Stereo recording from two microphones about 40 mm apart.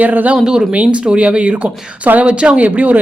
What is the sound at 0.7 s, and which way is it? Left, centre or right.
Speech, right.